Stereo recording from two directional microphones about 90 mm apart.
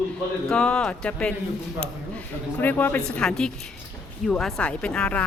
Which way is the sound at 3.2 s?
5° left (ahead or behind).